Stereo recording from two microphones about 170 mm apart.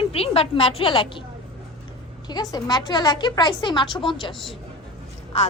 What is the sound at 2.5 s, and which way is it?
A woman's voice, 25° left (ahead or behind).